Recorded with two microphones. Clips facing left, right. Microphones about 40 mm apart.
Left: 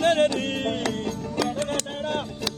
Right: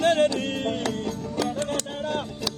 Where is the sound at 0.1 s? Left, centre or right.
Left.